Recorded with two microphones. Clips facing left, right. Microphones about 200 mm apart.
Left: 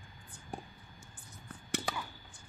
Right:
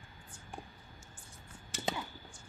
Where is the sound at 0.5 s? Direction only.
35° left (ahead or behind).